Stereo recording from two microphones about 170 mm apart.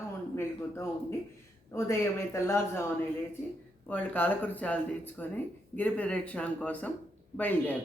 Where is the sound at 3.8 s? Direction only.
10° left (ahead or behind).